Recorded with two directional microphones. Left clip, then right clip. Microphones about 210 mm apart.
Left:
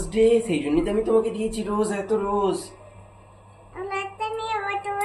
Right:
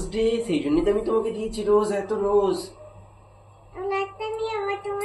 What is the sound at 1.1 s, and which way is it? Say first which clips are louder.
Speech: left 3 dB; 25° left (ahead or behind).